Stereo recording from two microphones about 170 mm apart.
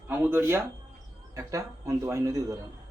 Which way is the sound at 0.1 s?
15° right (ahead or behind).